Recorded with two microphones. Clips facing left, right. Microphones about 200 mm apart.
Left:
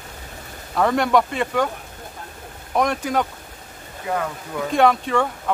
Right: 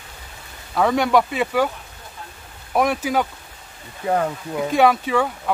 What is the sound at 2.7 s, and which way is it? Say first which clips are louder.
Speech: right 1 dB; 5° right (ahead or behind).